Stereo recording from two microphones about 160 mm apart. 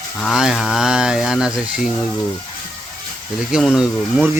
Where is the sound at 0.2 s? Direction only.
Centre (ahead or behind).